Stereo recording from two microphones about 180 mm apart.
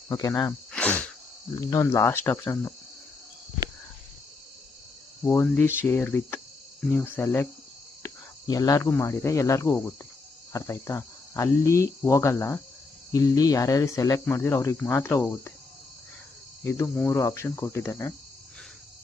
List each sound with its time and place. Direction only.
0.1 s speech: 20° left (ahead or behind)
0.7 s cricket: 5° left (ahead or behind)
1.5 s speech: 20° left (ahead or behind)
5.2 s speech: 10° left (ahead or behind)
16.6 s speech: 15° left (ahead or behind)